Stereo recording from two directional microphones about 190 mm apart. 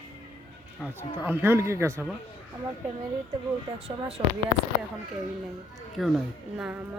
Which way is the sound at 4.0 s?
30° right (ahead or behind).